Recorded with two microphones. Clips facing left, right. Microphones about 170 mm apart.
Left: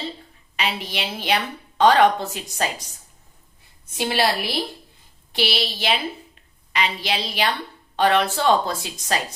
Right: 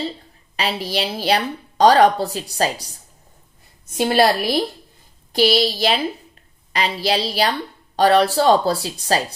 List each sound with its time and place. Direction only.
0.5 s a woman's voice: 35° right (ahead or behind)
3.9 s a woman's voice: 45° right (ahead or behind)